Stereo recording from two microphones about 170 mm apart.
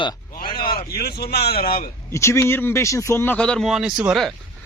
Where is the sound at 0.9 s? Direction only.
65° left (ahead or behind).